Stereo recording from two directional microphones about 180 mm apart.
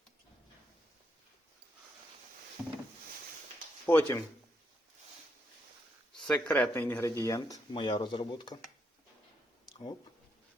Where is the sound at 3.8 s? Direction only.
10° left (ahead or behind).